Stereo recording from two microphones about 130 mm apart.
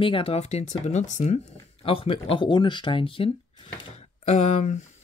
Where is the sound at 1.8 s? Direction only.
45° left (ahead or behind).